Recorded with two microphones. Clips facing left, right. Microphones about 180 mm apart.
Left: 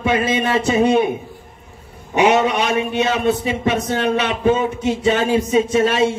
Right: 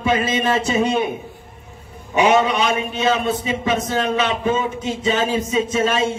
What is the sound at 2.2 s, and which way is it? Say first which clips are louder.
A man's voice: left 1 dB; 65° left (ahead or behind).